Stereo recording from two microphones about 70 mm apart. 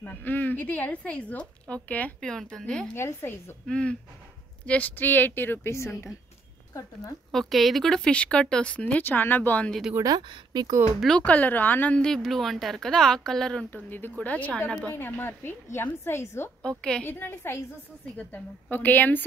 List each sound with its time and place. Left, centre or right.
0.0 s a woman's voice: left
2.2 s speech: centre
2.9 s a woman's voice: left
3.6 s a woman's voice: centre; by 5.9 s left
7.3 s speech: centre; by 9.7 s left
10.0 s a woman's voice: right
11.1 s a woman's voice: centre
12.0 s speech: centre
13.8 s a woman's voice: left
15.0 s a woman's voice: left
16.6 s speech: centre
17.0 s a woman's voice: left